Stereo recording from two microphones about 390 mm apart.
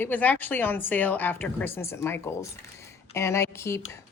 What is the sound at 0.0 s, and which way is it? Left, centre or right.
A woman's voice, centre.